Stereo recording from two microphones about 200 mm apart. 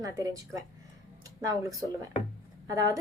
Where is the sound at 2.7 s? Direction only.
15° right (ahead or behind).